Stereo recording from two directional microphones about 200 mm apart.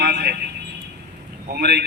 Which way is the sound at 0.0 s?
55° right (ahead or behind).